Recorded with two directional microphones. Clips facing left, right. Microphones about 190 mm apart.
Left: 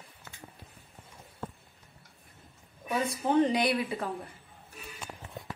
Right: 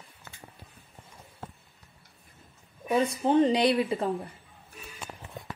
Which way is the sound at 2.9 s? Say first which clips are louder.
Right 4 dB; 25° right (ahead or behind).